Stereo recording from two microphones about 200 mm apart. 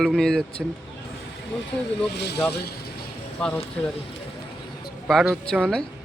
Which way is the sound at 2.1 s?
55° left (ahead or behind).